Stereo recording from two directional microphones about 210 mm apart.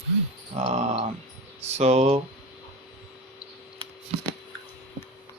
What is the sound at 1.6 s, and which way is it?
Speech, 30° right (ahead or behind).